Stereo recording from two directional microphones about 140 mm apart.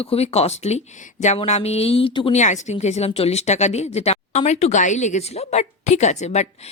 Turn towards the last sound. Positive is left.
turn(degrees=55)  # may be behind; listen again after turning